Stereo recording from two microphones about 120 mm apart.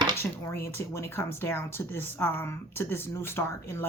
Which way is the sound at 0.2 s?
20° left (ahead or behind).